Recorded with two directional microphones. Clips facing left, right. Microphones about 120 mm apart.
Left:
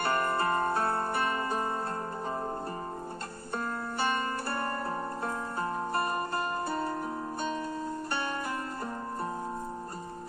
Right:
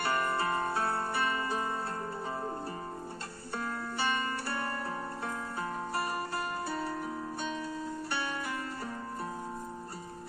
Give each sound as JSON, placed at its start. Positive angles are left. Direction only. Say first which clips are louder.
{"t": 0.0, "sound": "music", "louder": "left 2 dB", "side_deg": 50}
{"t": 3.5, "sound": "music", "louder": "left 2 dB", "side_deg": 45}
{"t": 8.1, "sound": "music", "louder": "left 2 dB", "side_deg": 45}